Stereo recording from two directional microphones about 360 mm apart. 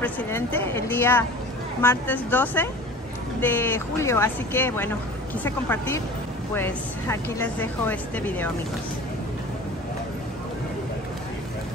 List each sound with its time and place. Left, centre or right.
0.0 s speech: centre